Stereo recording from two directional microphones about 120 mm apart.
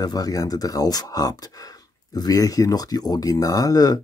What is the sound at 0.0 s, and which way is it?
Speech, 30° left (ahead or behind).